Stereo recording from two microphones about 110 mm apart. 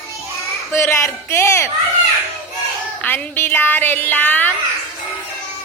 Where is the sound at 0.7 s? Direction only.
20° left (ahead or behind).